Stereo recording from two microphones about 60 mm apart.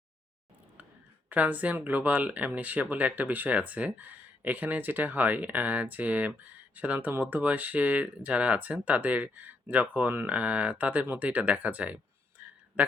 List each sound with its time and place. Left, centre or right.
1.3 s speech: right
12.4 s a sound: right
12.8 s speech: right